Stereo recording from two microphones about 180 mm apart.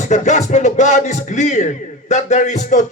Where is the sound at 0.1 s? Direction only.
40° left (ahead or behind).